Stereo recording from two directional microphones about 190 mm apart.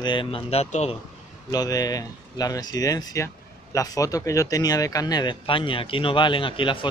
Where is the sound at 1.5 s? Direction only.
20° left (ahead or behind).